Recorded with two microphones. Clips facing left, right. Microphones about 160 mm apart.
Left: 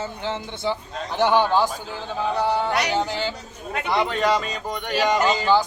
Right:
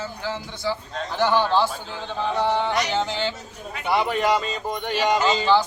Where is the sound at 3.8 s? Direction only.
15° right (ahead or behind).